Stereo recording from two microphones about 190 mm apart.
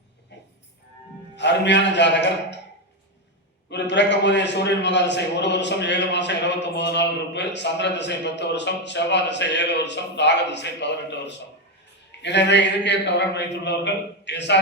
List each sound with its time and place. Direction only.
1.4 s a man's voice: 65° left (ahead or behind)
3.7 s a man's voice: 65° left (ahead or behind)